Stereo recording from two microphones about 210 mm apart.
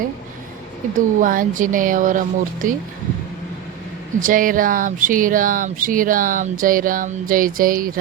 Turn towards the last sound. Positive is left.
turn(degrees=-40)  # may be behind; listen again after turning